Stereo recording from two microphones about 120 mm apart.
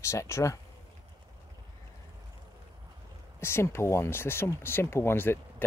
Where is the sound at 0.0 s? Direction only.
25° left (ahead or behind).